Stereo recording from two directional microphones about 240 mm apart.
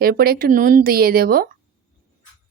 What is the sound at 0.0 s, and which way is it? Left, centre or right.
Speech, right.